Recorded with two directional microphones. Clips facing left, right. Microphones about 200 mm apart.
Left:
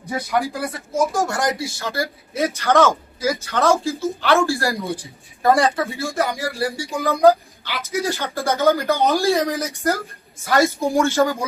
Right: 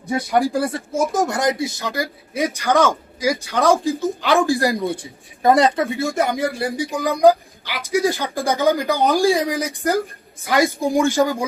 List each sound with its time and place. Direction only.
0.3 s speech: 30° right (ahead or behind)